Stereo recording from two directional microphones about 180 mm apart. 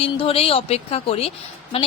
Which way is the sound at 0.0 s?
30° left (ahead or behind).